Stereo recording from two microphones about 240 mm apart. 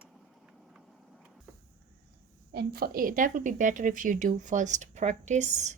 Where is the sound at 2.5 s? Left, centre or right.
Right.